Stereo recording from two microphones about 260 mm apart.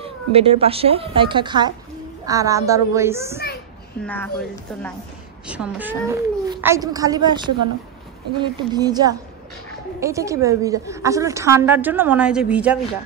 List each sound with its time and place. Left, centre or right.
0.0 s a woman's voice: right
4.0 s speech: centre
5.5 s a woman's voice: centre